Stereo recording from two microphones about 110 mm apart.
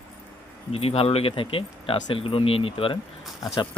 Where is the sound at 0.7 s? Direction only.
65° left (ahead or behind).